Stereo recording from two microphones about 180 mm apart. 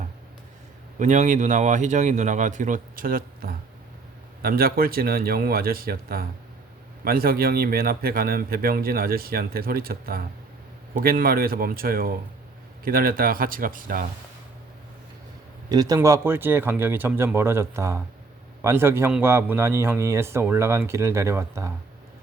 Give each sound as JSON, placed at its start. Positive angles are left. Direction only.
{"t": 0.9, "sound": "speech", "side_deg": -40}
{"t": 15.7, "sound": "a man's voice", "side_deg": -20}